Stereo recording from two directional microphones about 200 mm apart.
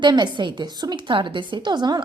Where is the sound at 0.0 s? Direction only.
20° right (ahead or behind).